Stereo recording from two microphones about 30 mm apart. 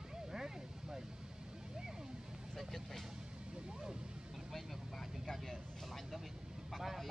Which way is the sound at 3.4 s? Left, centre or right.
Right.